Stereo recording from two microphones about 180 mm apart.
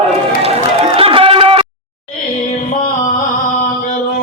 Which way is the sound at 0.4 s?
30° right (ahead or behind).